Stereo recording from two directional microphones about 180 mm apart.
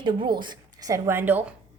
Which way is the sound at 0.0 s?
25° right (ahead or behind).